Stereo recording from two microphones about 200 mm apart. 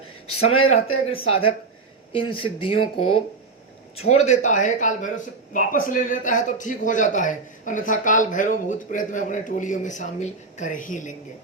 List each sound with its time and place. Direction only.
0.4 s speech: 30° left (ahead or behind)